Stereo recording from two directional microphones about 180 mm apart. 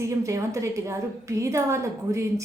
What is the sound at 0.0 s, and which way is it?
A woman's voice, 15° right (ahead or behind).